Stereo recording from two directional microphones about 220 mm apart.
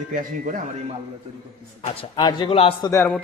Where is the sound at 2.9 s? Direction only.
10° left (ahead or behind).